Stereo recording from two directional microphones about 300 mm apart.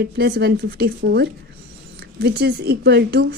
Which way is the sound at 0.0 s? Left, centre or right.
Right.